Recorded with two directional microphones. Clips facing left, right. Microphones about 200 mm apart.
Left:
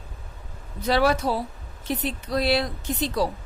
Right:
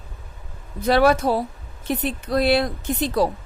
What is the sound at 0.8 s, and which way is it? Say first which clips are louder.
A woman's voice: right 4 dB; 55° right (ahead or behind).